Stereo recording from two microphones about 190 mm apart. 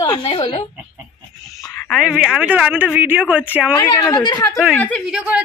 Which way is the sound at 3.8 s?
20° left (ahead or behind).